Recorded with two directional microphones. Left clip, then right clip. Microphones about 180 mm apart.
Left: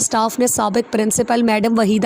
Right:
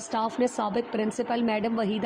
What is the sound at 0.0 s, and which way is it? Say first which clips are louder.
Speech: left 9 dB; 30° left (ahead or behind).